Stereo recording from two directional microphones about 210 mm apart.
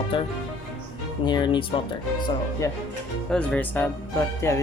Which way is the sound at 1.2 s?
20° left (ahead or behind).